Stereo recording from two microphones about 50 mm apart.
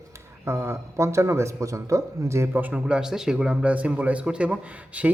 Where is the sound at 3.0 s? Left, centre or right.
Centre.